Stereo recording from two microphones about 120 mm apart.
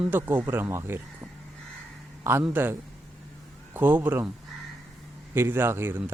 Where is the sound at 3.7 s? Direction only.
15° right (ahead or behind).